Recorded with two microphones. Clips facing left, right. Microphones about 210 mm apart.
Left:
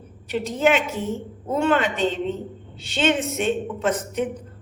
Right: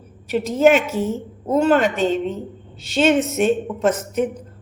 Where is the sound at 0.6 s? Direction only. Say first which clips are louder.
Right 6 dB; 45° right (ahead or behind).